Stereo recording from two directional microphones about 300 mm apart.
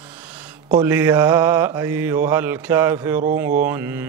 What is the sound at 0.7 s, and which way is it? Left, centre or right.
Mantra, centre.